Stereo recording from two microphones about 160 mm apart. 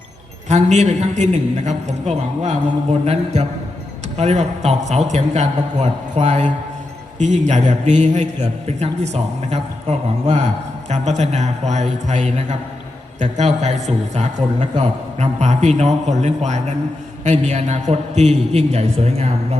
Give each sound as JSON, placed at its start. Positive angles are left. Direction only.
{"t": 0.4, "sound": "a man's voice", "side_deg": -45}
{"t": 10.8, "sound": "a man's voice", "side_deg": -45}